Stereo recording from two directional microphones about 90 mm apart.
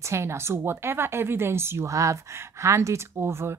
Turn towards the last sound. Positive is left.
turn(degrees=-30)  # may be behind; listen again after turning